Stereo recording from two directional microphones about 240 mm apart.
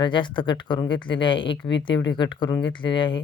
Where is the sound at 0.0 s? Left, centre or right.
Centre.